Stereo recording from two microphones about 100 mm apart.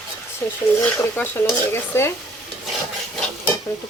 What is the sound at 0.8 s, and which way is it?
Speech, 20° left (ahead or behind).